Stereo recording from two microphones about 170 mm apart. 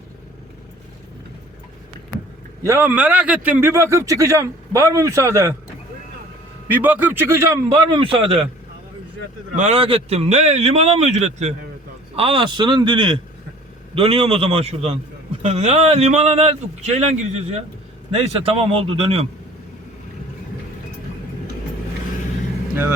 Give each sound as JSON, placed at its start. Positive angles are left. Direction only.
{"t": 2.6, "sound": "a man's voice", "side_deg": -10}
{"t": 6.7, "sound": "a man's voice", "side_deg": -10}
{"t": 9.6, "sound": "a man's voice", "side_deg": -35}